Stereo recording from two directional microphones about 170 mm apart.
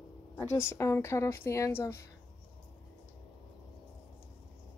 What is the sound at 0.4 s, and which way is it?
Speech, 15° left (ahead or behind).